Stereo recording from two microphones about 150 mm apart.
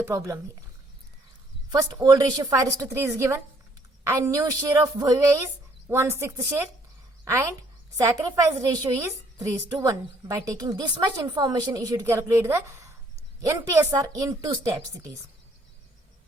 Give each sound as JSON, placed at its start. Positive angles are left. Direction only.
{"t": 0.0, "sound": "a woman's voice", "side_deg": -20}
{"t": 1.7, "sound": "a woman's voice", "side_deg": -25}